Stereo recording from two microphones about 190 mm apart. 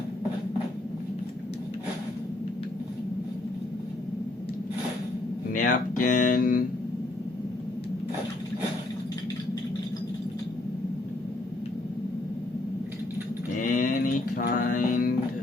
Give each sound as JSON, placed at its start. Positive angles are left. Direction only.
{"t": 5.5, "sound": "speech", "side_deg": 45}
{"t": 13.6, "sound": "music", "side_deg": 45}